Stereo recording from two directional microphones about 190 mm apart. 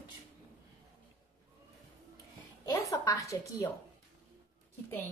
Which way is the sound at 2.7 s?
20° left (ahead or behind).